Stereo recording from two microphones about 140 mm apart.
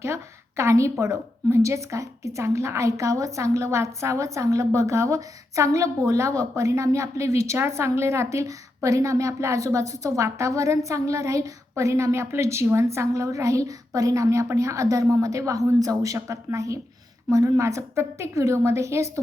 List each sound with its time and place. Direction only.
0.0 s a woman's voice: 20° right (ahead or behind)